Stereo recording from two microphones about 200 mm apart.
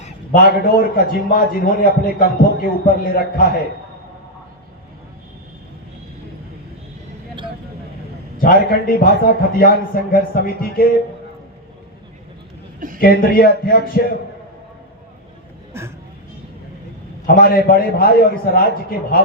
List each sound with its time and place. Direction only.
0.0 s a man's voice: 45° left (ahead or behind)
8.4 s a man's voice: 45° left (ahead or behind)
13.0 s a man's voice: 45° left (ahead or behind)
17.2 s a man's voice: 45° left (ahead or behind)